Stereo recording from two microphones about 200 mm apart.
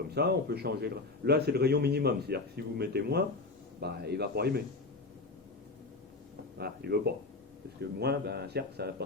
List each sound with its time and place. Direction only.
0.1 s a man's voice: 55° right (ahead or behind)
6.6 s a man's voice: 55° right (ahead or behind)